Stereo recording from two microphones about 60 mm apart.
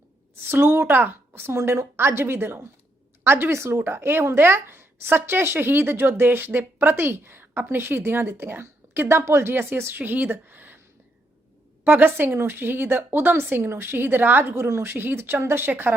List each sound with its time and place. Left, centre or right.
0.4 s speech: right
10.0 s speech: right
11.9 s speech: right